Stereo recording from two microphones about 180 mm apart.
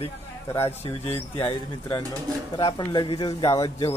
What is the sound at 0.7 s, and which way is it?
Speech, 35° left (ahead or behind).